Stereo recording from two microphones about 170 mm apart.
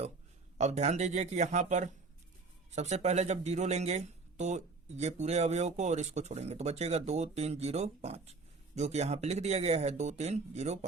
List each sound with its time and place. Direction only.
0.6 s speech: 40° right (ahead or behind)